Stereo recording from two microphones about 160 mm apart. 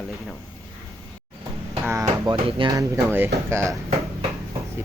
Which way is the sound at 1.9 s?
20° right (ahead or behind).